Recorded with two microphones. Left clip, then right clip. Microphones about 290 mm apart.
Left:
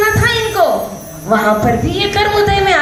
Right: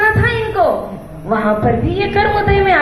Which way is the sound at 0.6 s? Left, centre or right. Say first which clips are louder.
Left 1 dB; left.